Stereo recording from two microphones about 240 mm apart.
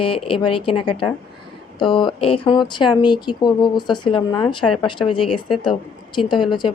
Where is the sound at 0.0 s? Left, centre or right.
Left.